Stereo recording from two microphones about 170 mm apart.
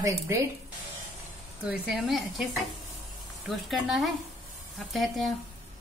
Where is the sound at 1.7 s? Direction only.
5° right (ahead or behind).